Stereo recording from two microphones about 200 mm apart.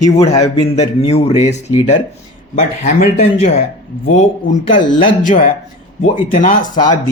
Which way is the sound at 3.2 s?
35° left (ahead or behind).